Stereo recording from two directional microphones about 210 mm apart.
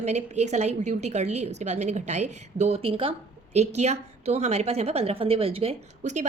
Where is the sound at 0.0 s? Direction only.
30° right (ahead or behind).